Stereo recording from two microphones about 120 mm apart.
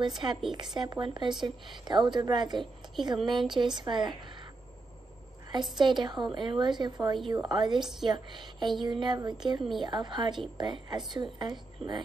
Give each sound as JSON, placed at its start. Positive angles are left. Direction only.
{"t": 0.0, "sound": "a woman's voice", "side_deg": -40}
{"t": 5.5, "sound": "a woman's voice", "side_deg": -40}